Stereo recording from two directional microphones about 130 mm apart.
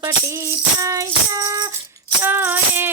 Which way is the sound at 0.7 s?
25° right (ahead or behind).